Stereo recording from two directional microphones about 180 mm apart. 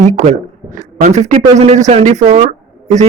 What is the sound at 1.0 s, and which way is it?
A man's voice, 40° right (ahead or behind).